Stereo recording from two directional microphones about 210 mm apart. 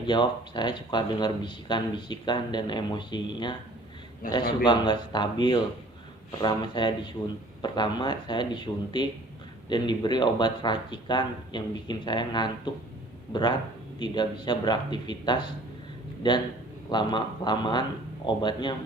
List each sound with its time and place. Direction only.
0.0 s speech: 20° left (ahead or behind)
4.2 s a man's voice: 40° left (ahead or behind)
4.6 s speech: 20° left (ahead or behind)
16.9 s speech: 20° left (ahead or behind)